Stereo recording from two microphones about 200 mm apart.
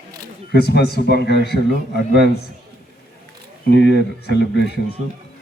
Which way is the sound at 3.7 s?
55° left (ahead or behind).